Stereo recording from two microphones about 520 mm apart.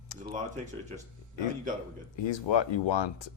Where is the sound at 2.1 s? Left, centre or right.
Left.